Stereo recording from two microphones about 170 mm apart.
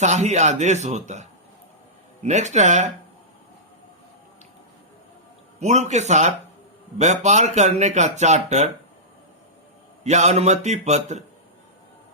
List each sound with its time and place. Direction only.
0.0 s speech: 40° right (ahead or behind)
5.5 s speech: 40° right (ahead or behind)
10.0 s a man's voice: 40° right (ahead or behind)